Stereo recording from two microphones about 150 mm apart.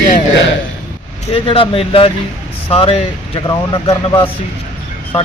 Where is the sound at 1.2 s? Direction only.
35° left (ahead or behind).